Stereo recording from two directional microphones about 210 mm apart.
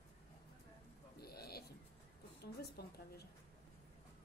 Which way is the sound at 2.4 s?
50° left (ahead or behind).